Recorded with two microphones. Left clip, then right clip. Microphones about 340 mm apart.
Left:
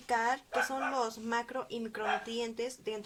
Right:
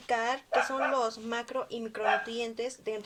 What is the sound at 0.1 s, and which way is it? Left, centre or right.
Speech, left.